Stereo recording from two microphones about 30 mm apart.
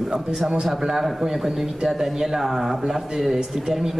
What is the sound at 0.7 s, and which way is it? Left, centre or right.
Speech, centre.